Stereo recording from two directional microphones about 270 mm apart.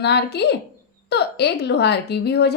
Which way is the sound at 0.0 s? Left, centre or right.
Left.